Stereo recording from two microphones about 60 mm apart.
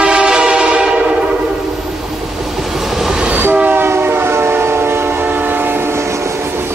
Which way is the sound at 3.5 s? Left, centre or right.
Right.